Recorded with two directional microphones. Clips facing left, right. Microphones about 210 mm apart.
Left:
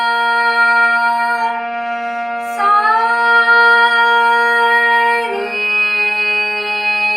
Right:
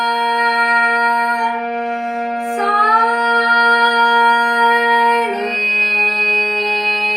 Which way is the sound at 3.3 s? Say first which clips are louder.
Left 1 dB; 35° right (ahead or behind).